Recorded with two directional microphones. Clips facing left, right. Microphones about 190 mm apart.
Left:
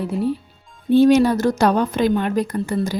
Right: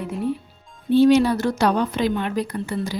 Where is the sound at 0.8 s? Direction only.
50° left (ahead or behind).